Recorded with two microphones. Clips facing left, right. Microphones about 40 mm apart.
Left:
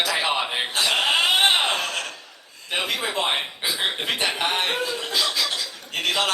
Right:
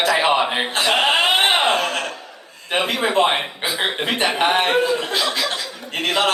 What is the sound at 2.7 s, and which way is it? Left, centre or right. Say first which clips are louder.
A man's voice: right 7 dB; right.